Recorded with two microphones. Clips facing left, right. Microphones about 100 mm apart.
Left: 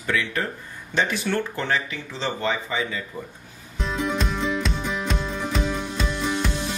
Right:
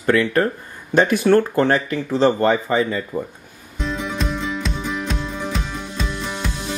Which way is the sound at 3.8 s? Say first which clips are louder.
Right 1 dB; centre (ahead or behind).